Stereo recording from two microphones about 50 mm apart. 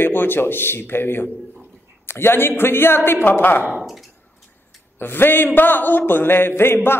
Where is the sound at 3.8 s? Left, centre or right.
Centre.